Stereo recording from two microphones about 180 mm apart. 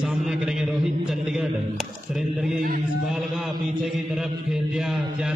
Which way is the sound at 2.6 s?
50° right (ahead or behind).